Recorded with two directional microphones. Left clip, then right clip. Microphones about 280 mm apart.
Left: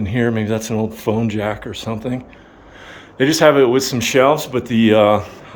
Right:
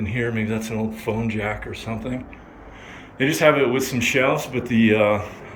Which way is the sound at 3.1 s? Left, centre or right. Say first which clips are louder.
Left 5 dB; centre.